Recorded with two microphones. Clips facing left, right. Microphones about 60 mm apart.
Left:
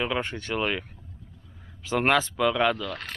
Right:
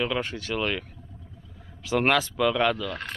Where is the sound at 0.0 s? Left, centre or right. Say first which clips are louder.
Even; centre.